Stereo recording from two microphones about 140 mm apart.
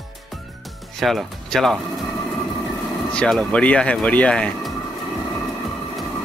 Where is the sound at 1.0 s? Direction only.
Centre (ahead or behind).